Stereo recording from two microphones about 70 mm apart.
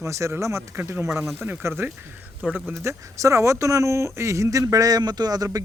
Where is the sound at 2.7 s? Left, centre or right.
Right.